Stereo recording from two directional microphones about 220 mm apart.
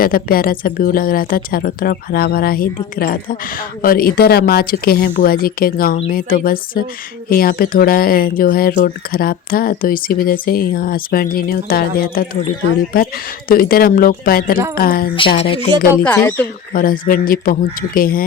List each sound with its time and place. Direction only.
0.0 s a woman's voice: 40° left (ahead or behind)
15.4 s speech: 25° left (ahead or behind)
16.0 s speech: 10° left (ahead or behind)
16.7 s speech: 40° left (ahead or behind)